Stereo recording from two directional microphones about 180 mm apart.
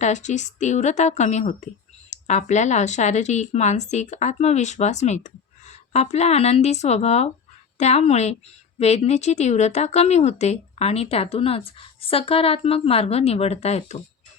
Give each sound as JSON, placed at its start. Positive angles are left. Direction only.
{"t": 0.0, "sound": "a woman's voice", "side_deg": 40}